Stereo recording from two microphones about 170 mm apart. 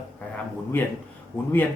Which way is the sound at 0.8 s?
10° left (ahead or behind).